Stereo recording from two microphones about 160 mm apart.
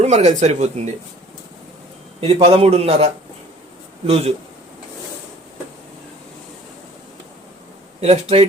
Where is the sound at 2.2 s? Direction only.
40° right (ahead or behind).